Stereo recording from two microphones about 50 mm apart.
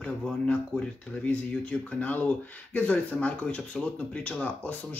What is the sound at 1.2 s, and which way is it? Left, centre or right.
Speech, left.